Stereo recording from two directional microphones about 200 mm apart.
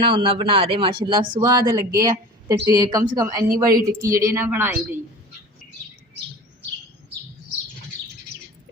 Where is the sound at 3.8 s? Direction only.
15° right (ahead or behind).